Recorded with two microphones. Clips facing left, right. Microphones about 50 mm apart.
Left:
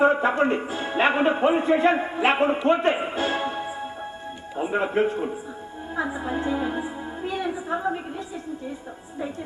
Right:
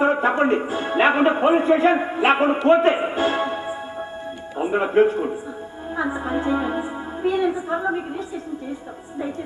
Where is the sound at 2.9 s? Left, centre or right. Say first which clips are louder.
Right 4 dB; centre.